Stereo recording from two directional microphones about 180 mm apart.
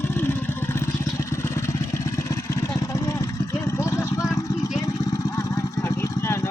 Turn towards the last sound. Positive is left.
turn(degrees=15)  # may be behind; listen again after turning